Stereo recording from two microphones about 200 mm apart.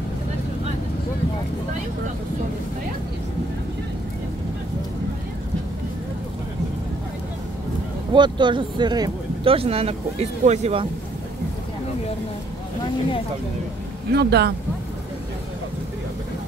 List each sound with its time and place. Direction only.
8.1 s speech: 25° right (ahead or behind)
14.1 s speech: 55° right (ahead or behind)